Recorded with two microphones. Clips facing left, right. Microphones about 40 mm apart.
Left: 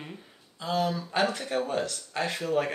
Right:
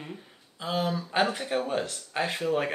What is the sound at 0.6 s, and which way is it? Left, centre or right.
Speech, centre.